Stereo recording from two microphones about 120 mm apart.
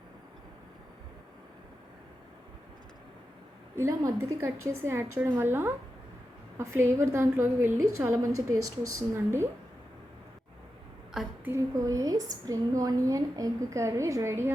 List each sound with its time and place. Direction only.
3.8 s a woman's voice: 25° right (ahead or behind)
11.4 s a woman's voice: 25° right (ahead or behind)